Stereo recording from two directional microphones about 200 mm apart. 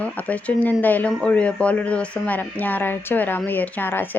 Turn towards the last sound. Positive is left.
turn(degrees=10)  # may be behind; listen again after turning